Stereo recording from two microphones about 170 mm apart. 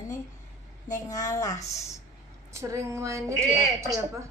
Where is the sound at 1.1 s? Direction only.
20° left (ahead or behind).